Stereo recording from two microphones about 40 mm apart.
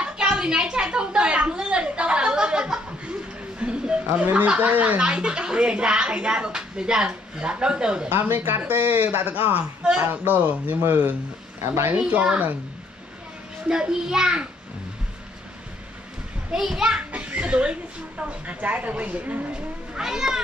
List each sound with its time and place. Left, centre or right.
0.0 s a sound: right
1.5 s chuckle: right
4.2 s speech: right
8.1 s speech: right
9.8 s speech: right
10.2 s speech: right
11.6 s a woman's voice: right
11.9 s speech: right
13.7 s speech: centre
16.5 s a child's voice: centre
17.0 s speech: right
19.9 s speech: centre